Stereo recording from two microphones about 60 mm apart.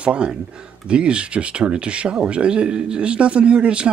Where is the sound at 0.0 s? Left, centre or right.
Centre.